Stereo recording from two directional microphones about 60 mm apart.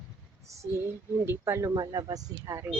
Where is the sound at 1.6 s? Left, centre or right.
Right.